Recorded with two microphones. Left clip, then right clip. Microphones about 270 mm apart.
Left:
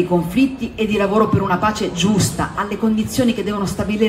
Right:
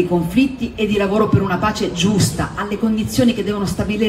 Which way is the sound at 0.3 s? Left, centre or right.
Centre.